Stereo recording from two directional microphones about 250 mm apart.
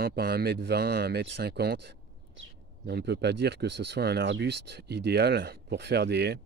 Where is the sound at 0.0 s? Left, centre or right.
Right.